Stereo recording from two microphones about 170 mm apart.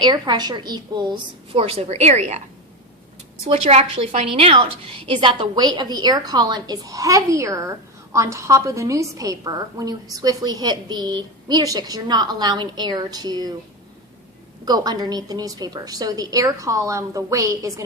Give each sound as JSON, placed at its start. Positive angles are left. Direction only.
{"t": 0.0, "sound": "a woman's voice", "side_deg": -25}
{"t": 3.4, "sound": "a woman's voice", "side_deg": -40}
{"t": 14.6, "sound": "a woman's voice", "side_deg": -25}